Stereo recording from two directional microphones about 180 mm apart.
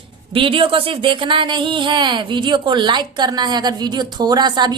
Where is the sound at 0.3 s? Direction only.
30° right (ahead or behind).